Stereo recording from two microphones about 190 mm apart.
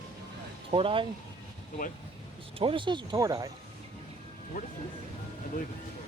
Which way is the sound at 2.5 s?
25° right (ahead or behind).